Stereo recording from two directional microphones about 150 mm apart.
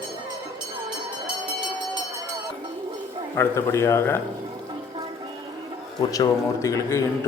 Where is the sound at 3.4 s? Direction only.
15° left (ahead or behind).